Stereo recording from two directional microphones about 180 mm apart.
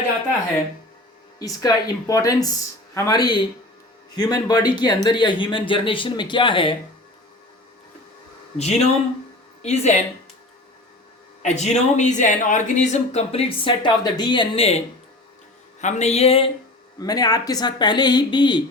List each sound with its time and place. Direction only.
1.4 s speech: 20° left (ahead or behind)
8.5 s speech: 35° left (ahead or behind)
11.4 s speech: 40° left (ahead or behind)
15.8 s speech: 40° left (ahead or behind)
17.0 s speech: 20° left (ahead or behind)